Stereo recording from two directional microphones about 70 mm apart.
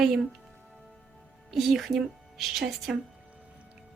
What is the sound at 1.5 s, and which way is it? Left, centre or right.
Speech, centre.